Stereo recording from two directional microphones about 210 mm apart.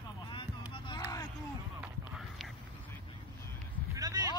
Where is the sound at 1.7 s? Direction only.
5° right (ahead or behind).